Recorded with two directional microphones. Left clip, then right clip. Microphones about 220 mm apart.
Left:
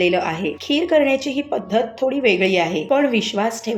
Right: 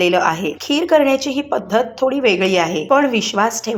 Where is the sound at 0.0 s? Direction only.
5° right (ahead or behind).